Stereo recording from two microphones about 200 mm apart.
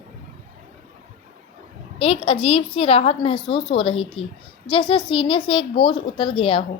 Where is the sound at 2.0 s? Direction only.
30° left (ahead or behind).